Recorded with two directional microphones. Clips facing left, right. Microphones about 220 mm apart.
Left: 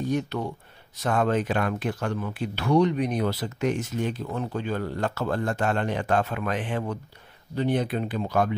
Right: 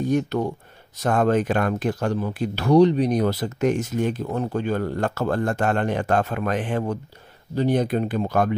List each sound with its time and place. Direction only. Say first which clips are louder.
0.1 s speech: right 5 dB; 45° right (ahead or behind)